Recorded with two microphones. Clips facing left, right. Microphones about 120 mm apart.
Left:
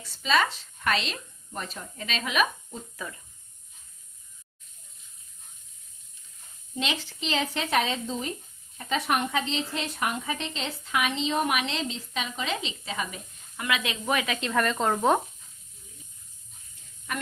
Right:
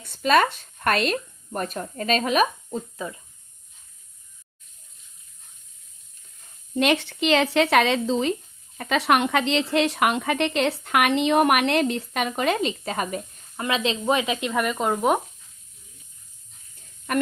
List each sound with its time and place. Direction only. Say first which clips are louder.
0.0 s speech: right 6 dB; 55° right (ahead or behind); by 3.1 s 35° right (ahead or behind)
6.7 s a woman's voice: right 10 dB; 60° right (ahead or behind); by 8.4 s 90° right
8.8 s speech: right 6 dB; 80° right; by 13.2 s 45° right (ahead or behind)
13.6 s speech: right 5 dB; 30° right (ahead or behind); by 15.2 s 10° right (ahead or behind)
17.1 s speech: right 10 dB; 55° right (ahead or behind)